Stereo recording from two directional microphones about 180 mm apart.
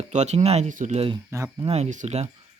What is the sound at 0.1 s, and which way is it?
Speech, 40° right (ahead or behind).